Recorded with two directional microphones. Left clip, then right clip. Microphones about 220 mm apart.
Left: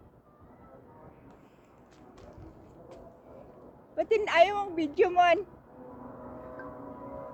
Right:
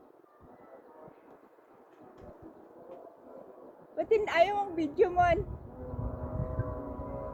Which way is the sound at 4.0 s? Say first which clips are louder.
Left 3 dB; 10° left (ahead or behind).